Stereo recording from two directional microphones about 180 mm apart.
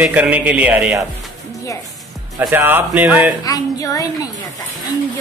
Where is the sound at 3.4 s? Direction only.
20° left (ahead or behind).